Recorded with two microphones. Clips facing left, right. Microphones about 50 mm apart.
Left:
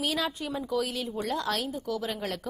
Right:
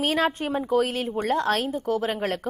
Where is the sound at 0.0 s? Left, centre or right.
Right.